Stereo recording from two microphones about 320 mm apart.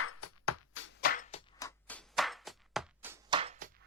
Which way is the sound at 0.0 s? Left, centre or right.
Left.